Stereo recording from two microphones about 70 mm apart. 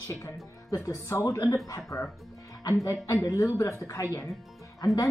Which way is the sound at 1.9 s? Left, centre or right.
Left.